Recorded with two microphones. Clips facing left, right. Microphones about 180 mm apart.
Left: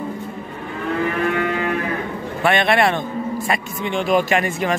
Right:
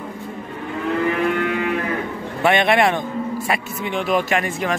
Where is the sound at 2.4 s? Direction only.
20° right (ahead or behind).